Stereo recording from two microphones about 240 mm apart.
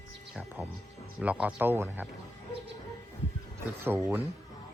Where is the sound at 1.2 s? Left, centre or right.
Centre.